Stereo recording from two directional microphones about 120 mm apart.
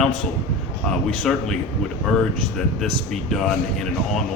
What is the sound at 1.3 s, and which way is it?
Speech, centre (ahead or behind).